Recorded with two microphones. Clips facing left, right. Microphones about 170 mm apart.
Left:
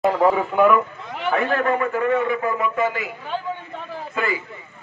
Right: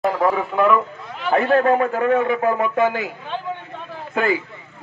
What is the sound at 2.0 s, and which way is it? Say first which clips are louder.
Speech: right 3 dB; 65° right (ahead or behind).